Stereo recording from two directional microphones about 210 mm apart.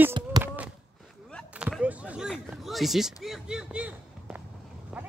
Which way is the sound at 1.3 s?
5° left (ahead or behind).